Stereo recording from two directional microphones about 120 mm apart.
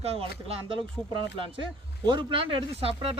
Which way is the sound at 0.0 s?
55° right (ahead or behind).